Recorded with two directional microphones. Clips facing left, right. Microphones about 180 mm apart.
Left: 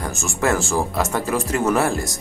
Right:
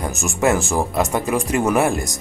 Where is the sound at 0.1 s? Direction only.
20° right (ahead or behind).